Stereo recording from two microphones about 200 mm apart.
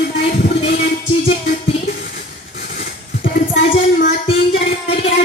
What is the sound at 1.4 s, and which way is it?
Music, 60° left (ahead or behind).